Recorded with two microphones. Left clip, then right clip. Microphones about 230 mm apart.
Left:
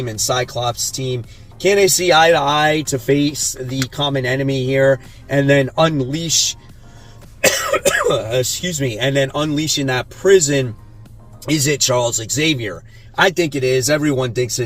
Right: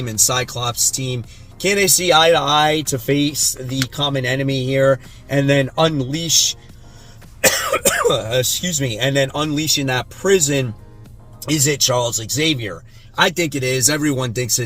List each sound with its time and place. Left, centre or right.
0.3 s speech: right
7.5 s speech: centre